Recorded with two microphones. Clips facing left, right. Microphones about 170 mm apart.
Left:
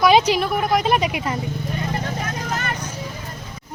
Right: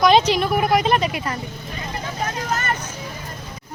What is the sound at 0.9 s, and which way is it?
Speech, 10° left (ahead or behind).